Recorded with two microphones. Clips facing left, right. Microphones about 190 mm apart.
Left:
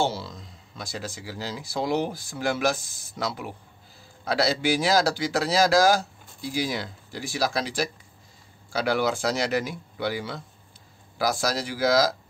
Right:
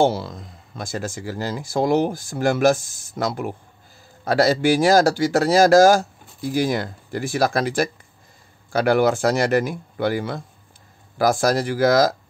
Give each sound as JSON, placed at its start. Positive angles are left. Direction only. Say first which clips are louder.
{"t": 0.0, "sound": "speech", "louder": "right 8 dB", "side_deg": -55}